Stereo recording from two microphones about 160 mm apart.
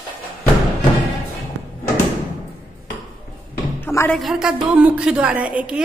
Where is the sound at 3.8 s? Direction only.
15° left (ahead or behind).